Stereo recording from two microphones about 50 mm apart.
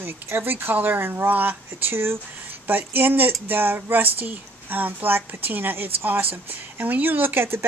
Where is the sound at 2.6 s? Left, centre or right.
Right.